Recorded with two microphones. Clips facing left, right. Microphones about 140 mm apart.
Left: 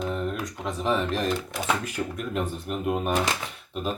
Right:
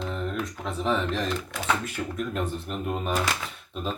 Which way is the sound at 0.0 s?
5° left (ahead or behind).